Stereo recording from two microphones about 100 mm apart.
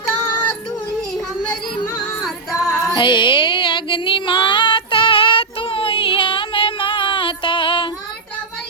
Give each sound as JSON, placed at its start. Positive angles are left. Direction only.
{"t": 2.2, "sound": "music", "side_deg": 5}
{"t": 2.9, "sound": "female singing", "side_deg": 50}